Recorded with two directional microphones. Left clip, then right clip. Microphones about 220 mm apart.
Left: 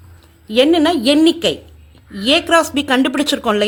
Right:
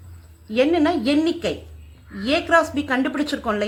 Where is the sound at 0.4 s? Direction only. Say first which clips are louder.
Left 6 dB; 45° left (ahead or behind).